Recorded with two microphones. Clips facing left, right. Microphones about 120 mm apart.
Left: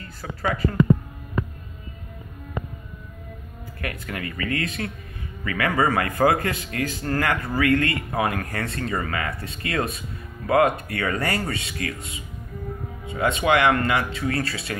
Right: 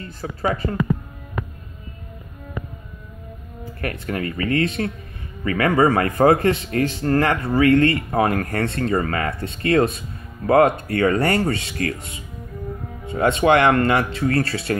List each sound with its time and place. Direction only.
0.0 s speech: 30° right (ahead or behind)
3.8 s a man's voice: 35° right (ahead or behind)
13.1 s a man's voice: 30° right (ahead or behind)
13.5 s speech: 45° right (ahead or behind)